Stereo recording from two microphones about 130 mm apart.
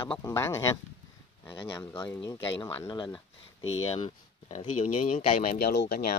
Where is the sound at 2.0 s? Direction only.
35° left (ahead or behind).